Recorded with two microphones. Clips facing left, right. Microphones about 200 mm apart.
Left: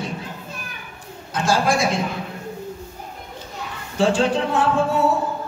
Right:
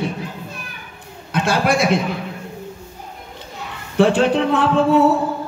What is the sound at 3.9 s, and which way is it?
Speech, 60° right (ahead or behind).